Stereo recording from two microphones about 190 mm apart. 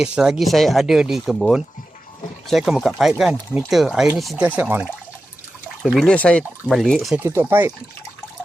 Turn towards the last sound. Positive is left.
turn(degrees=-10)  # may be behind; listen again after turning